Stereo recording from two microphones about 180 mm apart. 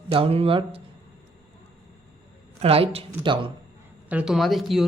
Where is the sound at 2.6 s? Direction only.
35° right (ahead or behind).